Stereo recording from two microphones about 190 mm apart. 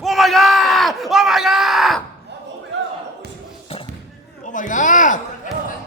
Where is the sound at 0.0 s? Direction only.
Centre (ahead or behind).